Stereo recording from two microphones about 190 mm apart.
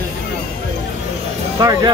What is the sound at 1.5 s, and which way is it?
Speech, 20° right (ahead or behind).